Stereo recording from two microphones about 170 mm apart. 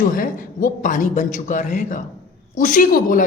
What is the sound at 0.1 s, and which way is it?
A woman's voice, 50° left (ahead or behind).